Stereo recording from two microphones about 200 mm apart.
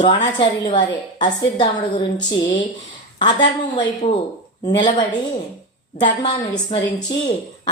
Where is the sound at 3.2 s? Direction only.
25° left (ahead or behind).